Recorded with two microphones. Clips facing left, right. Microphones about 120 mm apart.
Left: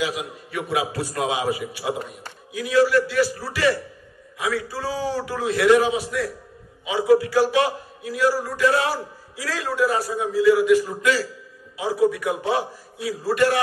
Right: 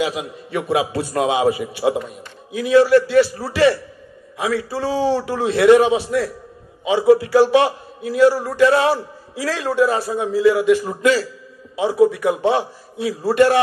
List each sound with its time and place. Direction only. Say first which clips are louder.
0.0 s a man's voice: right 4 dB; 30° right (ahead or behind)